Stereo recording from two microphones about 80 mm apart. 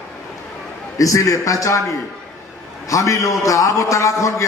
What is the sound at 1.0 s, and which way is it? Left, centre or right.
Speech, left.